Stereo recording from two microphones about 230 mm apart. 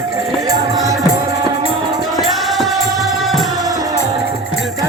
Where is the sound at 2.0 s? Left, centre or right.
Centre.